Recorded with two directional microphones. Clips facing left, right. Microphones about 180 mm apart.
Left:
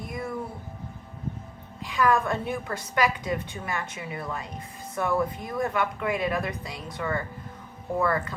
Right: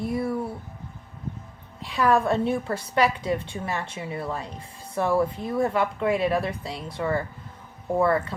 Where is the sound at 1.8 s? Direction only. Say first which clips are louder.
Right 2 dB; 35° right (ahead or behind).